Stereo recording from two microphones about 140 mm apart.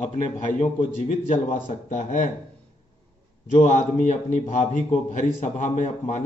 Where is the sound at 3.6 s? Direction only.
60° left (ahead or behind).